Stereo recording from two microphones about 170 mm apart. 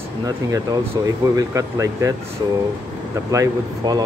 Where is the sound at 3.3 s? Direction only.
20° right (ahead or behind).